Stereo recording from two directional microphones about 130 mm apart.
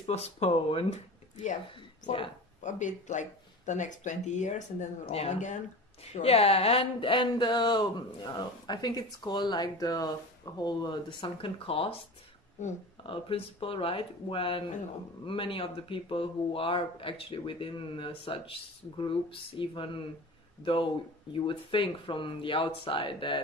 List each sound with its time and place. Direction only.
0.0 s speech: 55° left (ahead or behind)
2.6 s speech: 70° left (ahead or behind); by 12.0 s 50° left (ahead or behind)
12.6 s speech: 70° left (ahead or behind)
13.0 s speech: 45° left (ahead or behind)